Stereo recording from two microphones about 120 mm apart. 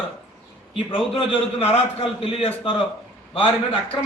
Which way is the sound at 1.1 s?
50° left (ahead or behind).